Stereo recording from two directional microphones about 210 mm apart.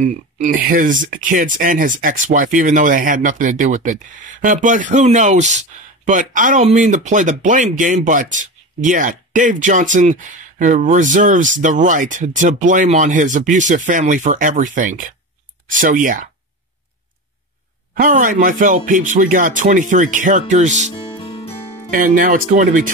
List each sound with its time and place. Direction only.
0.0 s speech: 35° right (ahead or behind)
17.9 s speech: 40° right (ahead or behind)
21.4 s music: 25° left (ahead or behind)
21.9 s speech: 40° right (ahead or behind)